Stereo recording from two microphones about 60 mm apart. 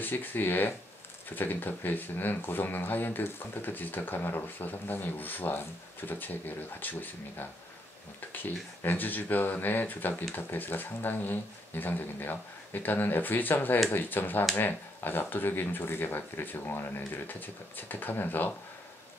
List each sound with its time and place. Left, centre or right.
0.0 s speech: left
8.8 s speech: left